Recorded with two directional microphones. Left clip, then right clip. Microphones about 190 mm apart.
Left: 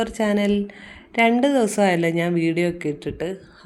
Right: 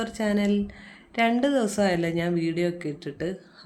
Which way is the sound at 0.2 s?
15° left (ahead or behind).